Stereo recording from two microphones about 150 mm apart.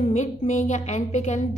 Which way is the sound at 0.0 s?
50° left (ahead or behind).